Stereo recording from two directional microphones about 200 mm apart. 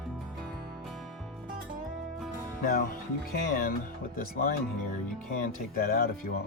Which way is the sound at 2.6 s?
45° left (ahead or behind).